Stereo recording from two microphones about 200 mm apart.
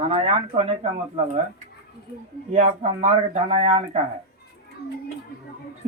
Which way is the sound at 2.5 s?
35° right (ahead or behind).